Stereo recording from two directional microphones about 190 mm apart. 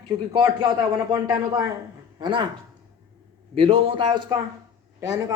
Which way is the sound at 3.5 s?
25° right (ahead or behind).